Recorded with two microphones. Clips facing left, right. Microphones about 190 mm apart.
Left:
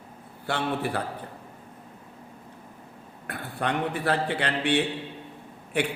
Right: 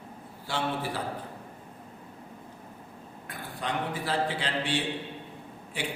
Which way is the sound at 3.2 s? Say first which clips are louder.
Left 5 dB; 65° left (ahead or behind).